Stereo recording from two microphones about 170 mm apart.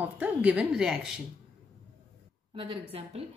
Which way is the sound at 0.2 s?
10° right (ahead or behind).